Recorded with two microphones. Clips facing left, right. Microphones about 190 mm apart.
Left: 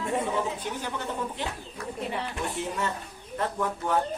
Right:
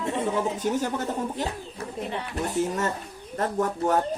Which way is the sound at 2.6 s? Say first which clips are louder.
Right 8 dB; 45° right (ahead or behind).